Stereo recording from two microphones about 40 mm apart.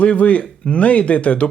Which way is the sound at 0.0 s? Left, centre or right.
Left.